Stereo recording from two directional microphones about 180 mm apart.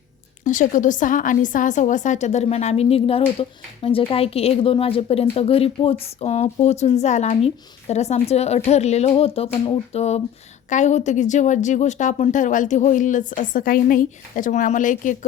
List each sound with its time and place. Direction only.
0.4 s a woman's voice: 45° left (ahead or behind)